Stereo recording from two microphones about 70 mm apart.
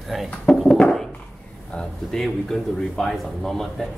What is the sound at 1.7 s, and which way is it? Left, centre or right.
Speech, centre.